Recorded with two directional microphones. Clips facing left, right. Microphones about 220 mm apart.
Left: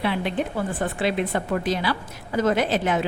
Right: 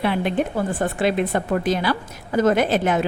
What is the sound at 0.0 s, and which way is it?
Speech, 50° right (ahead or behind).